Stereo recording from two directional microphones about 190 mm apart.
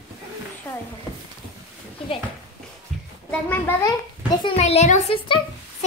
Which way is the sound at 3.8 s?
20° left (ahead or behind).